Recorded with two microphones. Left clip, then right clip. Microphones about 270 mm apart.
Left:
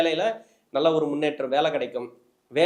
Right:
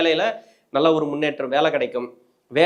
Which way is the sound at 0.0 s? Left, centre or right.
Right.